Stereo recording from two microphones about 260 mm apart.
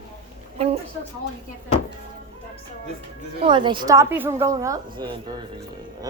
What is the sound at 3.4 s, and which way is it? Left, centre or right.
Speech, centre.